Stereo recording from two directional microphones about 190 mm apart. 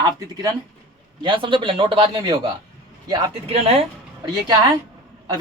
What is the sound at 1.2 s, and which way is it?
Speech, 25° right (ahead or behind).